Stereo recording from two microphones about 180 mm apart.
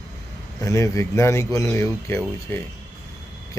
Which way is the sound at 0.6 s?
15° left (ahead or behind).